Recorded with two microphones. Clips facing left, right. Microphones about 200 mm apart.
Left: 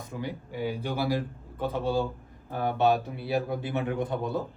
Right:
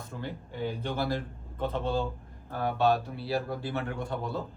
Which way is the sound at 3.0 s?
20° left (ahead or behind).